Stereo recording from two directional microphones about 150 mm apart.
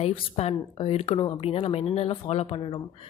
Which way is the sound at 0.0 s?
45° left (ahead or behind).